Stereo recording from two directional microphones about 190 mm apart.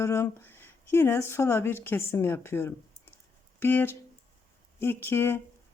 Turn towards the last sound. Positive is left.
turn(degrees=10)  # may be behind; listen again after turning